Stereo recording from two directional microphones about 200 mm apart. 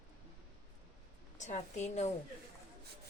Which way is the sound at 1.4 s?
35° left (ahead or behind).